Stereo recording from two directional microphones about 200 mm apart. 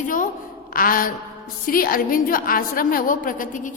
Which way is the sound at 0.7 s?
45° left (ahead or behind).